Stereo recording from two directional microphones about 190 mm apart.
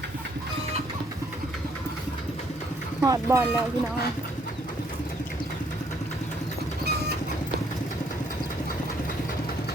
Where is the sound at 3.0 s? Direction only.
15° right (ahead or behind).